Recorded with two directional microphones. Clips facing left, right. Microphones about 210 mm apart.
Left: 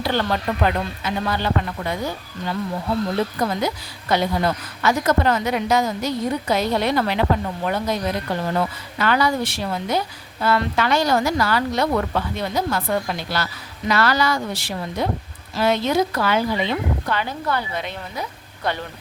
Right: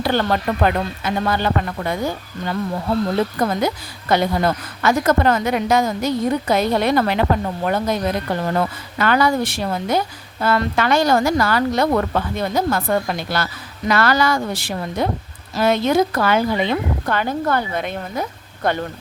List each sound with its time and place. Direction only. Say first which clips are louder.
0.0 s a woman's voice: right 3 dB; 50° right (ahead or behind)
3.4 s a woman's voice: right 3 dB; 50° right (ahead or behind)